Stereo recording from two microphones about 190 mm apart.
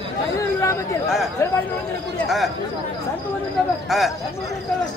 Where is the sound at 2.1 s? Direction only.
Centre (ahead or behind).